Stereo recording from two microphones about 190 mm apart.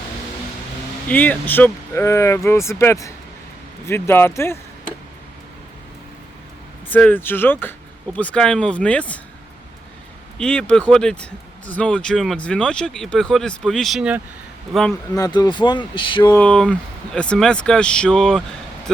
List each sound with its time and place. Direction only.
1.0 s speech: 10° left (ahead or behind)
6.9 s speech: 10° left (ahead or behind)
10.3 s speech: 5° left (ahead or behind)
15.1 s speech: 20° left (ahead or behind)
16.3 s speech: 5° left (ahead or behind)